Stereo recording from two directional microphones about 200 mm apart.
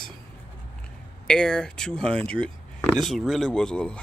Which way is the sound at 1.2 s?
5° left (ahead or behind).